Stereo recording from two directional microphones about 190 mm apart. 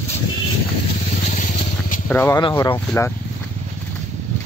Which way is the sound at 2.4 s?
25° left (ahead or behind).